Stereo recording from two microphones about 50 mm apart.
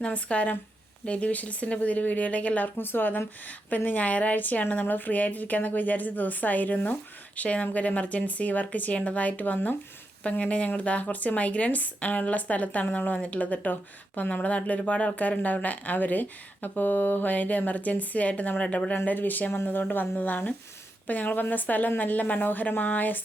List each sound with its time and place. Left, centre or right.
0.0 s speech: left
2.7 s a woman's voice: left
3.7 s speech: left
19.0 s speech: left